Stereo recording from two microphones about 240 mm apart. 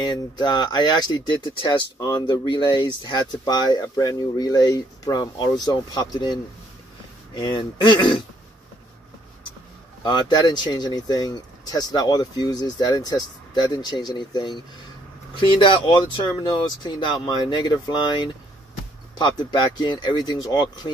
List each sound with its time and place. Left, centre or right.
0.0 s speech: centre
10.0 s speech: centre